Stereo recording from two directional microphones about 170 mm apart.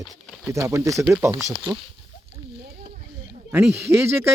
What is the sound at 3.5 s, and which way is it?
Speech, 15° right (ahead or behind).